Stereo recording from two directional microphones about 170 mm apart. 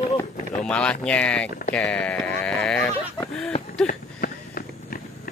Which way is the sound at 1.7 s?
10° left (ahead or behind).